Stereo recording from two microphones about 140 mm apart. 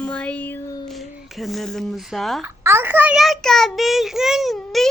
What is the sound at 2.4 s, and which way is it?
A child's voice, 15° right (ahead or behind).